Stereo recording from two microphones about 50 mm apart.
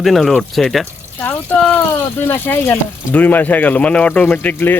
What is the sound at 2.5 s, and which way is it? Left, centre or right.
Speech, left.